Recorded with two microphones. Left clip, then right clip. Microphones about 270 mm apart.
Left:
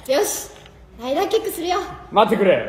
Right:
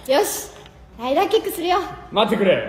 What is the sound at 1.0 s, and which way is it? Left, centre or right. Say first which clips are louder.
Speech: right 2 dB; centre.